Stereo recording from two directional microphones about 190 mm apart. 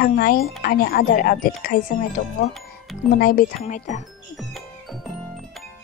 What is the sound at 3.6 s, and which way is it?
Speech, 40° left (ahead or behind).